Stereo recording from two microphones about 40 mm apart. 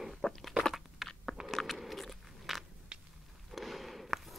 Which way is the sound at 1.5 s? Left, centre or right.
Centre.